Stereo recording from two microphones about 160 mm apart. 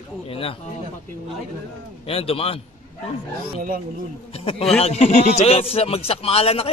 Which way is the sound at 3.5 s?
60° right (ahead or behind).